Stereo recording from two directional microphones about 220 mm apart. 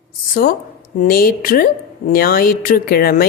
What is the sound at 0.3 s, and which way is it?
A woman's voice, 40° left (ahead or behind).